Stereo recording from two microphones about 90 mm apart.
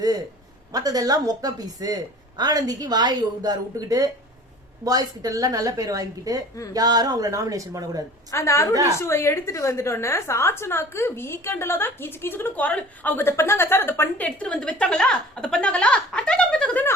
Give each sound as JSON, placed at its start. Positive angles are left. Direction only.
{"t": 0.7, "sound": "a woman's voice", "side_deg": -45}
{"t": 8.3, "sound": "a woman's voice", "side_deg": 30}
{"t": 14.3, "sound": "a woman's voice", "side_deg": 10}